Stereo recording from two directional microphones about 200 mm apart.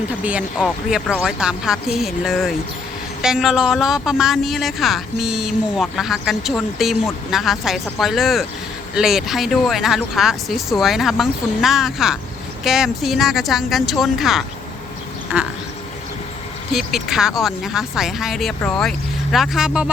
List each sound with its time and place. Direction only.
0.1 s speech: 5° right (ahead or behind)
16.7 s speech: centre (ahead or behind)